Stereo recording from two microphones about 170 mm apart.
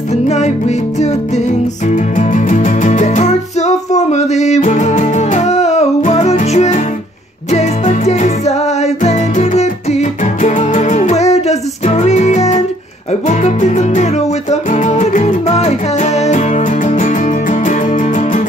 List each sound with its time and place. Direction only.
0.1 s music: 40° left (ahead or behind)